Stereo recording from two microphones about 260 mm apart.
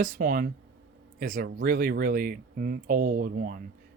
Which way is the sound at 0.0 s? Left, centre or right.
Right.